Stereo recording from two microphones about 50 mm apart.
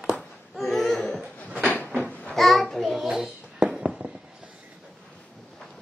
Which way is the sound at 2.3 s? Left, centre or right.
Centre.